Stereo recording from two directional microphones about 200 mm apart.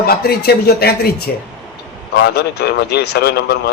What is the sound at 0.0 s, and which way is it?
A man's voice, 50° left (ahead or behind).